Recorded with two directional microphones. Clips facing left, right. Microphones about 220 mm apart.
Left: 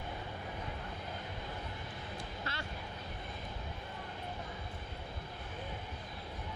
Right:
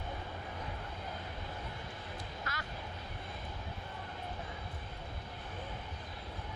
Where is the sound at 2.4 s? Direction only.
30° left (ahead or behind).